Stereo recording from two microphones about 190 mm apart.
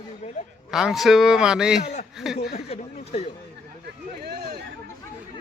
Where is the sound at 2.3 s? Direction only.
60° left (ahead or behind).